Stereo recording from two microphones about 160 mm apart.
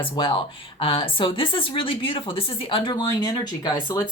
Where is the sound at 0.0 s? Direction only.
35° left (ahead or behind).